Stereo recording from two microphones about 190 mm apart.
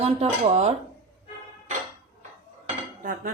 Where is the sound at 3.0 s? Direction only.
40° right (ahead or behind).